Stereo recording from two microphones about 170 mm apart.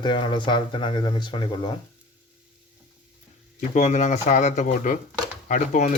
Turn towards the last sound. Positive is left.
turn(degrees=50)  # may be behind; listen again after turning